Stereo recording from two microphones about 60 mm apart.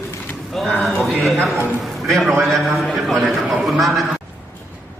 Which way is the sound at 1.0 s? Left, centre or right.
Centre.